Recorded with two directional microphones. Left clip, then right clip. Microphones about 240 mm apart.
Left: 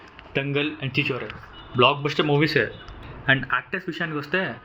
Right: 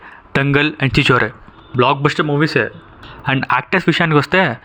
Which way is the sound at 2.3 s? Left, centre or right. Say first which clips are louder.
Right 5 dB; right.